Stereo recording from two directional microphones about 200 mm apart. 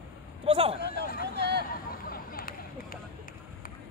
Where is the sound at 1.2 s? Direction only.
55° right (ahead or behind).